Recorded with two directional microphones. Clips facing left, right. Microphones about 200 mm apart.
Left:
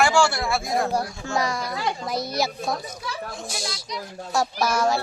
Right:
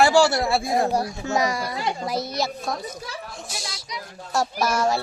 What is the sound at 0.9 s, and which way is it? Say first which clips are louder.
Speech: right 2 dB; 20° right (ahead or behind).